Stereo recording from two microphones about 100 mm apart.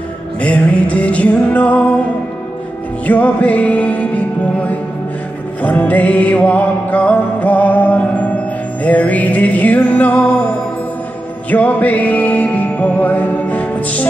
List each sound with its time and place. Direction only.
0.4 s music: 10° left (ahead or behind)
3.1 s music: 15° left (ahead or behind)
11.5 s music: 15° left (ahead or behind)